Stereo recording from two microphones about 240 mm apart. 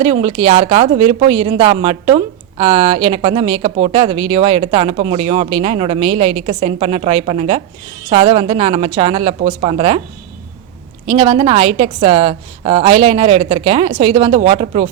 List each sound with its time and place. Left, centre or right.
0.0 s speech: right
11.0 s speech: right